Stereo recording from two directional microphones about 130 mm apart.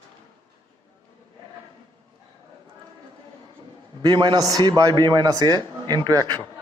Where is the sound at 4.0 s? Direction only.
35° right (ahead or behind).